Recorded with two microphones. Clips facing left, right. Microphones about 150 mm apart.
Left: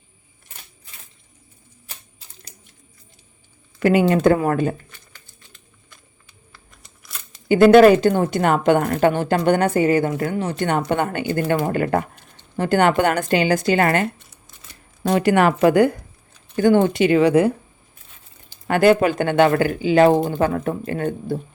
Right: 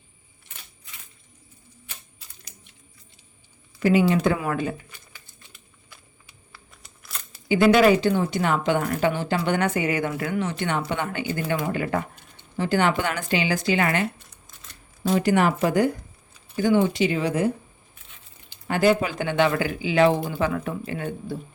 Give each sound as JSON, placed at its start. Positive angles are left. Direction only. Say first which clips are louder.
{"t": 3.8, "sound": "a woman's voice", "louder": "left 3 dB", "side_deg": 60}
{"t": 5.5, "sound": "a sound", "louder": "even", "side_deg": -10}
{"t": 7.4, "sound": "a woman's voice", "louder": "left 7 dB", "side_deg": 50}
{"t": 15.0, "sound": "speech", "louder": "left 4 dB", "side_deg": 65}
{"t": 16.6, "sound": "speech", "louder": "left 5 dB", "side_deg": 55}
{"t": 18.7, "sound": "a woman's voice", "louder": "left 6 dB", "side_deg": 60}